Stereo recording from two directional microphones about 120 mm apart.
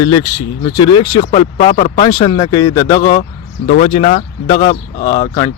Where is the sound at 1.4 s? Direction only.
55° left (ahead or behind).